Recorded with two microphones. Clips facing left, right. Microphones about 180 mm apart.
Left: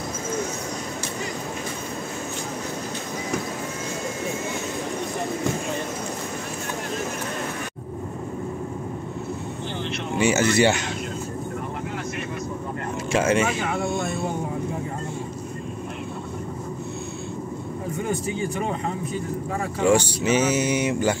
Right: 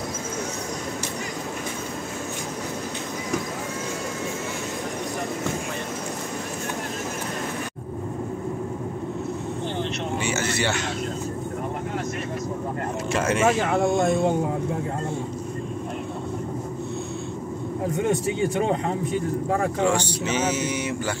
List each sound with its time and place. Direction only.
10.1 s a sound: 15° left (ahead or behind)
13.1 s speech: centre (ahead or behind)
13.5 s speech: 40° right (ahead or behind)
17.9 s speech: 70° right (ahead or behind)
19.8 s speech: 10° left (ahead or behind)